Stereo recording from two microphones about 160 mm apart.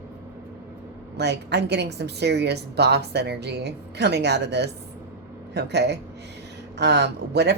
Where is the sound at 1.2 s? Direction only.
90° right.